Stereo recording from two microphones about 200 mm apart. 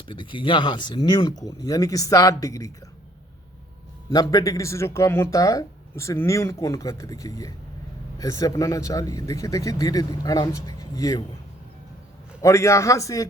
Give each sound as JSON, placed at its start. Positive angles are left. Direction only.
{"t": 0.1, "sound": "speech", "side_deg": 25}
{"t": 4.1, "sound": "speech", "side_deg": 20}
{"t": 12.4, "sound": "speech", "side_deg": 15}